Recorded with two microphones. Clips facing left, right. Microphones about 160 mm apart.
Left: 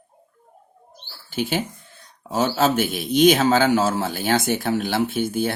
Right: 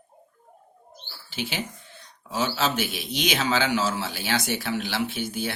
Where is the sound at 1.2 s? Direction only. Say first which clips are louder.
Left 7 dB; 50° left (ahead or behind).